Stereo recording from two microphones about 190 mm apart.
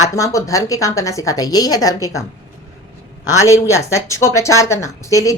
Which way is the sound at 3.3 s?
15° left (ahead or behind).